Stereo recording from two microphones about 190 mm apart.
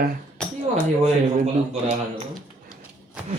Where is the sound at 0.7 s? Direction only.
35° right (ahead or behind).